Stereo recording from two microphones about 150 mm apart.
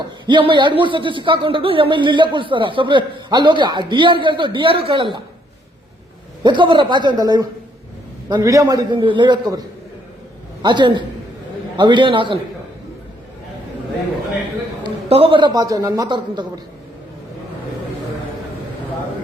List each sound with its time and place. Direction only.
0.3 s speech: 35° right (ahead or behind)
6.4 s a man's voice: 30° right (ahead or behind)
14.8 s a man's voice: 35° right (ahead or behind)